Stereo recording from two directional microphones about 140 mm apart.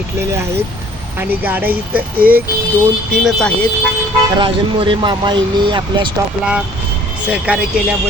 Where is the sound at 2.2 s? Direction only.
90° right.